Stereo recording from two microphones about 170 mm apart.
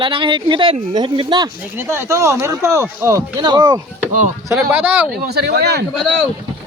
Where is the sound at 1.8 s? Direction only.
15° right (ahead or behind).